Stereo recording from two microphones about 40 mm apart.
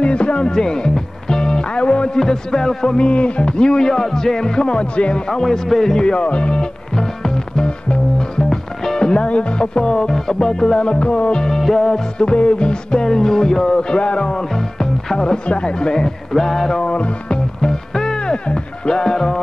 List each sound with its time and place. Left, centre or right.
0.0 s music: left
2.1 s music: centre
3.0 s speech: left
5.3 s music: centre
8.5 s speech: centre
11.6 s music: centre
12.2 s speech: left
13.0 s music: centre
13.7 s speech: left
14.5 s speech: centre
16.8 s music: left